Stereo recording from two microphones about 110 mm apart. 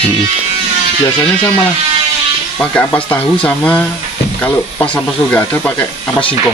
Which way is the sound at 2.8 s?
15° left (ahead or behind).